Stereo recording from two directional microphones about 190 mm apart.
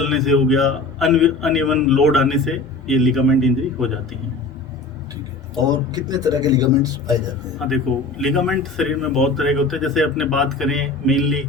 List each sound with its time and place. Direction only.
0.0 s a man's voice: centre (ahead or behind)
5.6 s a man's voice: 20° right (ahead or behind)
8.2 s a man's voice: centre (ahead or behind)